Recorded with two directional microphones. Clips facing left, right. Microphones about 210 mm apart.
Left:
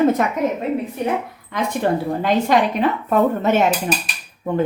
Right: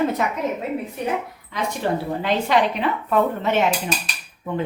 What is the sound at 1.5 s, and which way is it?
Speech, 55° left (ahead or behind).